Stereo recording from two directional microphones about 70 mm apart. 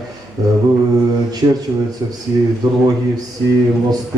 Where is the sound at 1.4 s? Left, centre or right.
Right.